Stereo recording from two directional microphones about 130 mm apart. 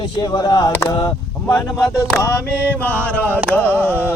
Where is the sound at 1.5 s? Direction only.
10° left (ahead or behind).